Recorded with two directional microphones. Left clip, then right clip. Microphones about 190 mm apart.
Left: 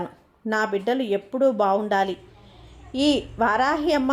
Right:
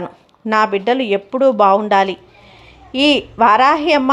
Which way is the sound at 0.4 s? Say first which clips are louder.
Right 9 dB; 15° right (ahead or behind).